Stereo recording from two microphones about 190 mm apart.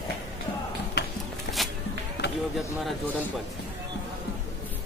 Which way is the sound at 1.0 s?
60° left (ahead or behind).